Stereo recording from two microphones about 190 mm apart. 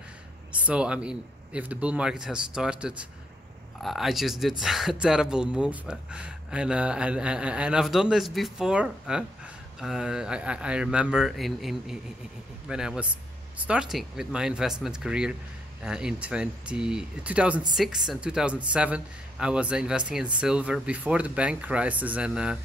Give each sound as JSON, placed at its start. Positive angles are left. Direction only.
{"t": 0.7, "sound": "speech", "side_deg": -5}